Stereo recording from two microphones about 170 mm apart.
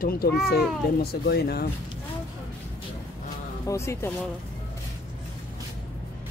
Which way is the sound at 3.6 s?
15° left (ahead or behind).